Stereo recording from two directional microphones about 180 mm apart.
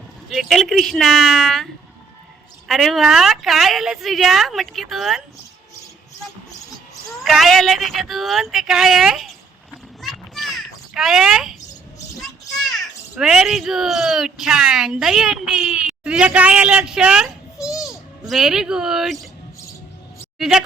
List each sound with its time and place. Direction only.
0.3 s a woman's voice: centre (ahead or behind)
2.6 s a woman's voice: centre (ahead or behind)
7.2 s a woman's voice: centre (ahead or behind)
10.0 s a sound: centre (ahead or behind)
12.2 s a child's voice: centre (ahead or behind)
20.4 s a woman's voice: centre (ahead or behind)